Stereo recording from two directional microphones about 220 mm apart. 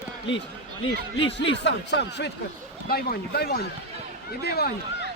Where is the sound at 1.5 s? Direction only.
50° left (ahead or behind).